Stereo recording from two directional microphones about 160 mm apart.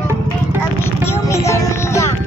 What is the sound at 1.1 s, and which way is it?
Music, 20° left (ahead or behind).